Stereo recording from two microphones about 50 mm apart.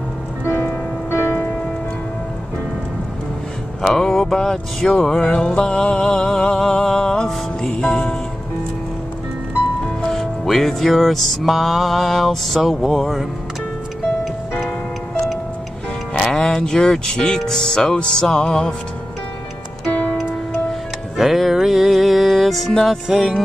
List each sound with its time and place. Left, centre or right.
1.1 s music: left
3.8 s mantra: centre
10.1 s music: centre
16.1 s speech: centre
17.4 s mantra: centre
19.9 s music: left
21.2 s speech: centre
23.0 s music: centre